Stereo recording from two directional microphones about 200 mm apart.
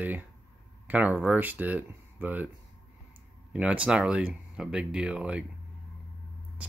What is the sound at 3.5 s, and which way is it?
Speech, 5° right (ahead or behind).